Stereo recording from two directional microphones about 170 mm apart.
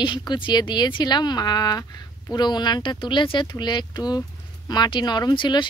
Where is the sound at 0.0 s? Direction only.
25° left (ahead or behind).